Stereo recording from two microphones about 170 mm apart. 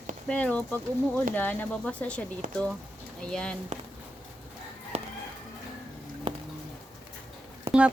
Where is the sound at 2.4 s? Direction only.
50° right (ahead or behind).